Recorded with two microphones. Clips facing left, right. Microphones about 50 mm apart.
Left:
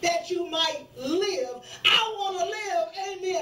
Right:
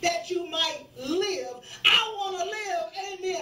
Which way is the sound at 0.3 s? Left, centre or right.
Right.